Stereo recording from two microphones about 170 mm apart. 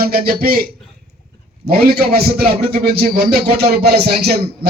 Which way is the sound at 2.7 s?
65° right (ahead or behind).